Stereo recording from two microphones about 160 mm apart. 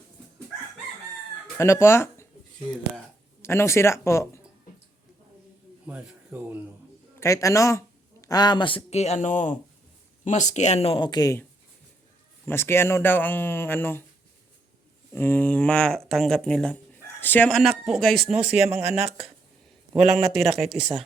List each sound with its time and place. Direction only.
1.5 s speech: 15° left (ahead or behind)
3.4 s speech: 15° left (ahead or behind)
5.8 s speech: 10° right (ahead or behind)
7.2 s speech: 20° left (ahead or behind)
12.5 s speech: 15° left (ahead or behind)
15.1 s speech: 15° left (ahead or behind); by 18.9 s 10° right (ahead or behind)
18.9 s speech: 40° right (ahead or behind)
20.0 s speech: 5° right (ahead or behind)